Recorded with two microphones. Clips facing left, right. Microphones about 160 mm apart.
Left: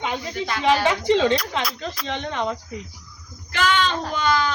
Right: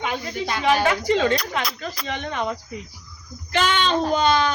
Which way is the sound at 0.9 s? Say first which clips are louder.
Left 1 dB; 5° right (ahead or behind).